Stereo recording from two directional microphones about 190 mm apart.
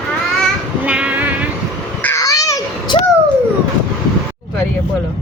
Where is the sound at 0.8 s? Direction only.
5° right (ahead or behind).